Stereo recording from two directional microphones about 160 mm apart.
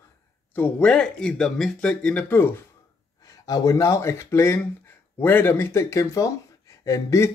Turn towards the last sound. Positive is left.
turn(degrees=20)  # may be behind; listen again after turning